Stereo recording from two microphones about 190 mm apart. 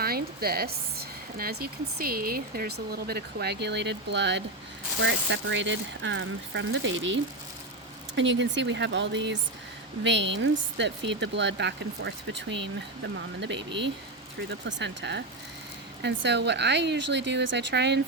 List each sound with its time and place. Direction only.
0.0 s speech: 55° right (ahead or behind)